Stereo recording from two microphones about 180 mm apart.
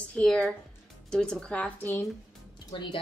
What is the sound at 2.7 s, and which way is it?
Speech, 30° left (ahead or behind).